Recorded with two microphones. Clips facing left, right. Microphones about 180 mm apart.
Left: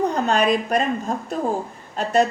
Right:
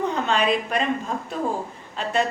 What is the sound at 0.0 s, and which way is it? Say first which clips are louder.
A woman's voice: left 3 dB; 40° left (ahead or behind).